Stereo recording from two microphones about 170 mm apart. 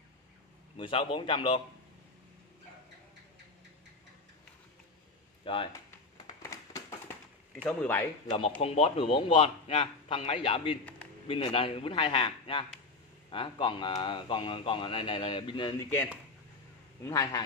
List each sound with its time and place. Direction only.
0.7 s a man's voice: 30° left (ahead or behind)
5.4 s speech: 30° left (ahead or behind)
7.6 s speech: 10° left (ahead or behind)
8.3 s a man's voice: 30° left (ahead or behind)
17.0 s speech: 20° left (ahead or behind)